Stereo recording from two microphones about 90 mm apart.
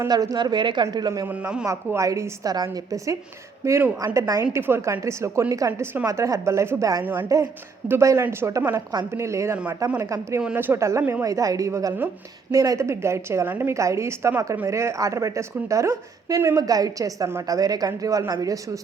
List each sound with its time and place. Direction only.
0.1 s speech: 45° right (ahead or behind)
1.3 s a man's voice: 10° right (ahead or behind)
1.6 s a woman's voice: 35° right (ahead or behind)
7.0 s speech: 20° right (ahead or behind)
7.9 s a woman's voice: 30° right (ahead or behind)
10.5 s a woman's voice: 25° right (ahead or behind); by 18.8 s 40° right (ahead or behind)